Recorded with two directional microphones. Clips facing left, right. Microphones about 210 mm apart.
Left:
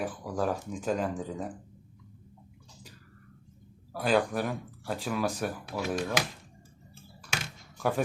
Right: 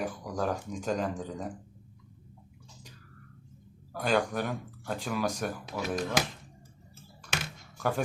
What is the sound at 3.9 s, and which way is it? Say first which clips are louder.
Speech: left 2 dB; 5° left (ahead or behind).